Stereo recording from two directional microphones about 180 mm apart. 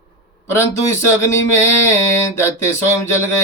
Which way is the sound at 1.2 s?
15° left (ahead or behind).